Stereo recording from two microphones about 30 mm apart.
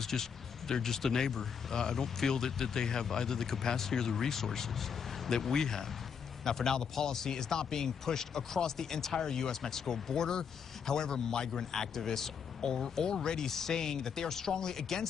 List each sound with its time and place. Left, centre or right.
0.0 s speech: centre
5.3 s speech: centre